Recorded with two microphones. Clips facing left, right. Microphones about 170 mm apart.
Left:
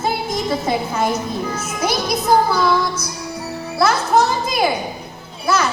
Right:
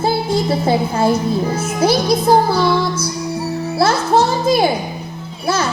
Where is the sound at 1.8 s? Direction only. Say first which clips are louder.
Right 6 dB; 30° right (ahead or behind).